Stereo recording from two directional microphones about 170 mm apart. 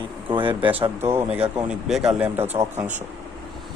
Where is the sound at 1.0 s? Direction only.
15° right (ahead or behind).